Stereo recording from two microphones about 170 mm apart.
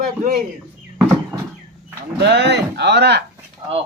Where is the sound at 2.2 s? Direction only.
90° right.